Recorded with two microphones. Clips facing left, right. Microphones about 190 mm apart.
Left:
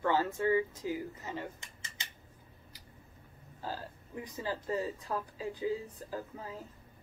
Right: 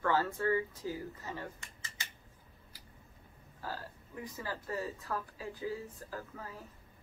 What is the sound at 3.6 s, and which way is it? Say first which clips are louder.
Speech: left 2 dB; 20° left (ahead or behind).